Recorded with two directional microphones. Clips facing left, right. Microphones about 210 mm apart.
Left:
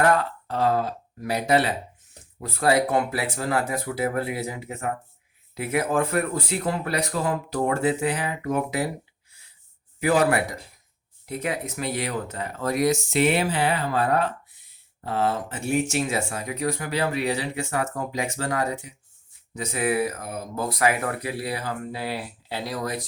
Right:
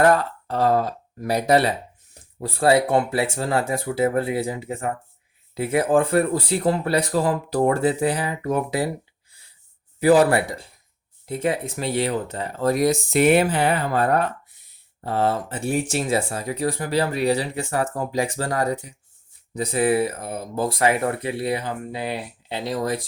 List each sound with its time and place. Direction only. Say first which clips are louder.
0.0 s speech: right 4 dB; 40° right (ahead or behind)
10.0 s speech: right 5 dB; 35° right (ahead or behind)
15.0 s speech: right 3 dB; 35° right (ahead or behind)